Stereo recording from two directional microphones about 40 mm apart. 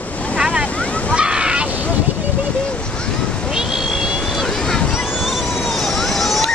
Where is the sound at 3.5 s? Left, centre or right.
Centre.